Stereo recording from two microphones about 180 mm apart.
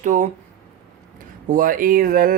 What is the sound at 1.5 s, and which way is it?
Speech, 50° right (ahead or behind).